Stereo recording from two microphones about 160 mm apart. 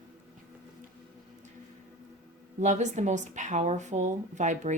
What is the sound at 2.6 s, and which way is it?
Speech, 45° right (ahead or behind).